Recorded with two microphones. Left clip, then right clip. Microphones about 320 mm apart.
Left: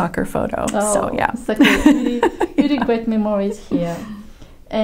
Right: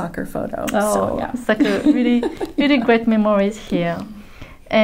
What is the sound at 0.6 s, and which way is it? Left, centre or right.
A woman's voice, right.